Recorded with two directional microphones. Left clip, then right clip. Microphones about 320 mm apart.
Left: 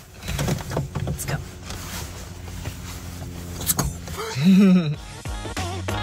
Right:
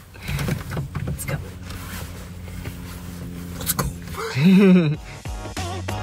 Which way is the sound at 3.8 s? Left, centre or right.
Centre.